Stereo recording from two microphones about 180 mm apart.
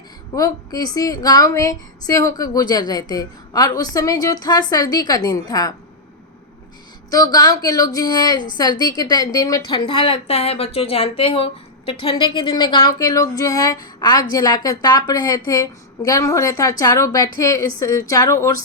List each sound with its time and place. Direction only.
0.3 s a woman's voice: 20° left (ahead or behind)
7.1 s a woman's voice: 20° left (ahead or behind)